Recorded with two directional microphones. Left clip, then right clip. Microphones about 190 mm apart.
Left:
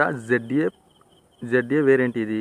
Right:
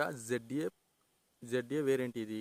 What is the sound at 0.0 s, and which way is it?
Speech, 25° right (ahead or behind).